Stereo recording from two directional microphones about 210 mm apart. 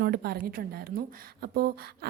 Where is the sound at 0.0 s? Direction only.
45° right (ahead or behind).